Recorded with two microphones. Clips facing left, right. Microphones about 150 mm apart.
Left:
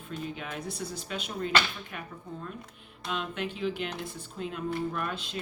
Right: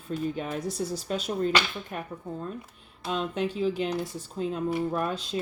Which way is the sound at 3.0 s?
40° right (ahead or behind).